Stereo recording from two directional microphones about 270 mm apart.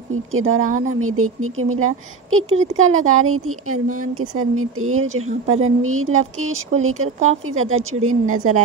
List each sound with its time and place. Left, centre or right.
0.1 s speech: right
0.7 s speech: right
0.9 s speech: right